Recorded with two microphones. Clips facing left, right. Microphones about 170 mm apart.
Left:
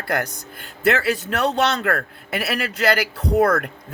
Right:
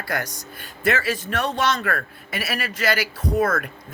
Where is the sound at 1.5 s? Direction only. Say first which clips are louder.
Left 3 dB; 70° left (ahead or behind).